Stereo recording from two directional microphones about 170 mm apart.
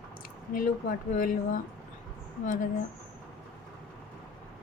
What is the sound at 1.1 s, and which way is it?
Speech, 55° left (ahead or behind).